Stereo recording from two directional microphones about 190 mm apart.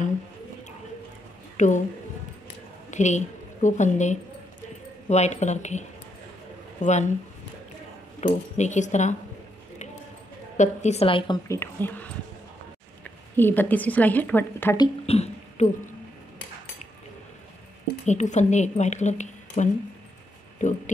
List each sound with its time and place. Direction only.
1.6 s a woman's voice: 40° left (ahead or behind)
2.9 s a woman's voice: 40° left (ahead or behind)
8.2 s a woman's voice: 35° left (ahead or behind)
10.6 s a woman's voice: 35° left (ahead or behind)
11.4 s a woman's voice: 15° left (ahead or behind)
13.4 s a woman's voice: 10° left (ahead or behind)
14.8 s a sound: 35° left (ahead or behind)
18.0 s a woman's voice: 40° left (ahead or behind)